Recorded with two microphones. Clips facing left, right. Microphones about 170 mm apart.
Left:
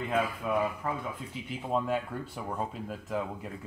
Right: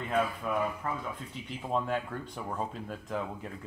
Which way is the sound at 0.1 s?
5° left (ahead or behind).